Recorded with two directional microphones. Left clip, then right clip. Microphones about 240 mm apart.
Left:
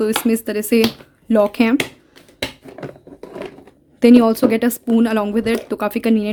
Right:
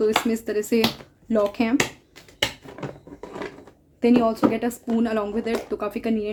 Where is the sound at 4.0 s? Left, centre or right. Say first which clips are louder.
Left 7 dB; left.